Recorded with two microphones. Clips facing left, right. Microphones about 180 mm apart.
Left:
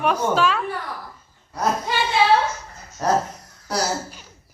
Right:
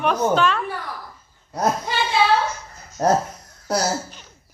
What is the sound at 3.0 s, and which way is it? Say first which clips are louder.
Speech: right 3 dB; 45° right (ahead or behind).